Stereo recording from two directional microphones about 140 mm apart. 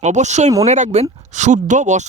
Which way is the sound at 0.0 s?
60° right (ahead or behind).